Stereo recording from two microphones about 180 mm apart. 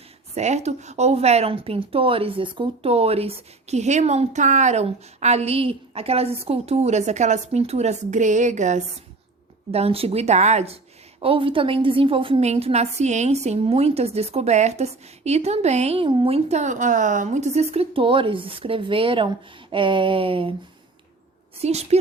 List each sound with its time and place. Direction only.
0.3 s a woman's voice: 40° right (ahead or behind)
21.6 s a woman's voice: 35° right (ahead or behind)